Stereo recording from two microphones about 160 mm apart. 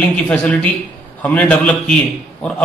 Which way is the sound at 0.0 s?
10° left (ahead or behind).